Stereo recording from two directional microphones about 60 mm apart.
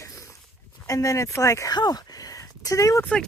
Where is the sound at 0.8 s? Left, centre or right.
Left.